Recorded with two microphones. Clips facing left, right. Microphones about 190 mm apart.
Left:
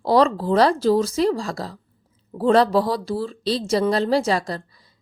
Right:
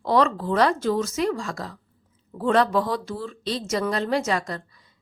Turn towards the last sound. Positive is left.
turn(degrees=35)  # may be behind; listen again after turning